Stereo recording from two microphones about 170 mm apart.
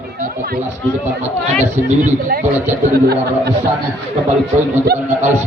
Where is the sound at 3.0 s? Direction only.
70° right (ahead or behind).